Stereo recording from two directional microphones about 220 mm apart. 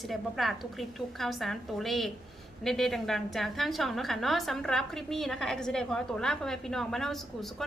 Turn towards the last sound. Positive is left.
turn(degrees=0)  # may be behind; listen again after turning